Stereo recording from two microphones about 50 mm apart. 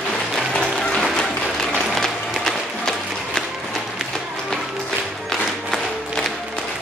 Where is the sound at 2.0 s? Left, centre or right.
Centre.